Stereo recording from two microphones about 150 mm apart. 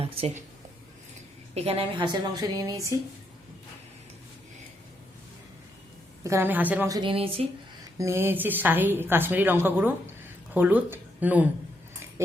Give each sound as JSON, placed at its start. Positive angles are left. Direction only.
{"t": 0.0, "sound": "a woman's voice", "side_deg": -45}
{"t": 1.5, "sound": "a woman's voice", "side_deg": -40}
{"t": 6.2, "sound": "a woman's voice", "side_deg": -15}
{"t": 6.8, "sound": "a woman's voice", "side_deg": -25}
{"t": 7.1, "sound": "speech", "side_deg": -40}
{"t": 7.9, "sound": "a woman's voice", "side_deg": -20}